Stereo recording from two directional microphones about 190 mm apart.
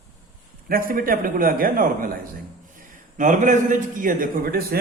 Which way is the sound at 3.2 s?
40° right (ahead or behind).